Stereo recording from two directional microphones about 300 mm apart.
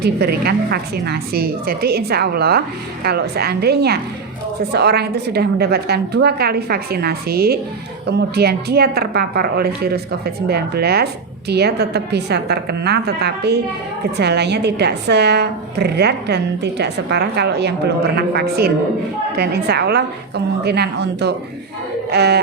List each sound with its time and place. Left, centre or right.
0.0 s a woman's voice: right